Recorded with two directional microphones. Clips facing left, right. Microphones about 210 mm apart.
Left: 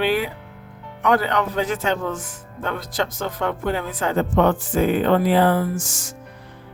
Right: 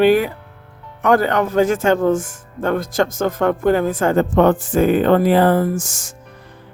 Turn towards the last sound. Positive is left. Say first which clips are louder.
# right 5 dB
turn(degrees=-45)  # may be behind; listen again after turning